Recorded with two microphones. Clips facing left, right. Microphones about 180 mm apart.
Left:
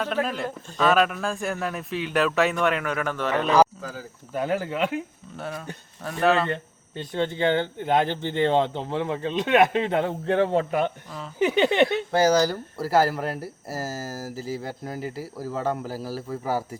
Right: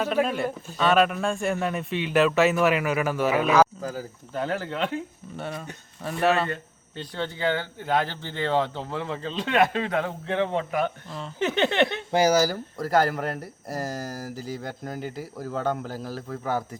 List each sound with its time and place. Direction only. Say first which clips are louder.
0.0 s speech: right 2 dB; 10° right (ahead or behind)
4.4 s speech: left 3 dB; 10° left (ahead or behind)
5.4 s speech: left 1 dB; centre (ahead or behind)
6.9 s speech: left 5 dB; 20° left (ahead or behind)
10.2 s speech: left 4 dB; 45° left (ahead or behind)
11.1 s speech: left 4 dB; 5° left (ahead or behind)
12.1 s speech: right 1 dB; 10° right (ahead or behind)
12.7 s speech: left 1 dB; 5° left (ahead or behind)